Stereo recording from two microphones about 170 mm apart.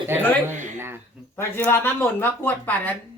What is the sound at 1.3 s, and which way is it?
Speech, 15° left (ahead or behind).